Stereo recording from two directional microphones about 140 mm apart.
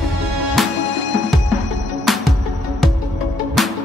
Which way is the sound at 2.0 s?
Centre (ahead or behind).